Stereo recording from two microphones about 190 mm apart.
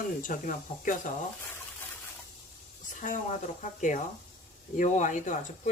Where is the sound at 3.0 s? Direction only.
40° left (ahead or behind).